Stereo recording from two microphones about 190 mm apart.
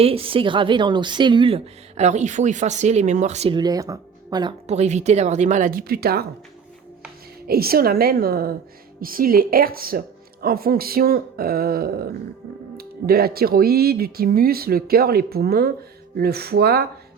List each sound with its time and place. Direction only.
0.0 s a woman's voice: 30° right (ahead or behind)
4.6 s speech: 35° right (ahead or behind); by 6.2 s 55° right (ahead or behind)
7.4 s speech: 55° right (ahead or behind)